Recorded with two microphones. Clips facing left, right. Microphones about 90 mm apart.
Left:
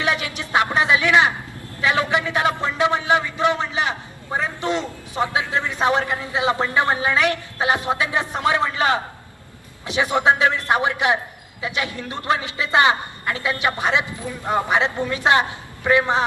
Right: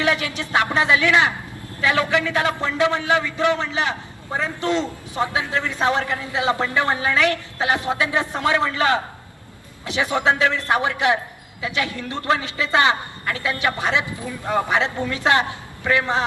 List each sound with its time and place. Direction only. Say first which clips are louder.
0.0 s a man's voice: right 2 dB; 20° left (ahead or behind)